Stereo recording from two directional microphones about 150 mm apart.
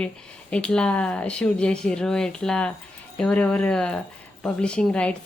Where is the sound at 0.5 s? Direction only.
5° left (ahead or behind).